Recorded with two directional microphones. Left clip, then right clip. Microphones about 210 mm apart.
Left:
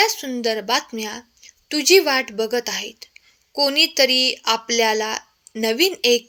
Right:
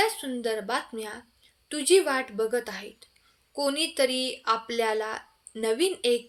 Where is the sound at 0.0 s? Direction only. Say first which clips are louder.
Left 7 dB; 35° left (ahead or behind).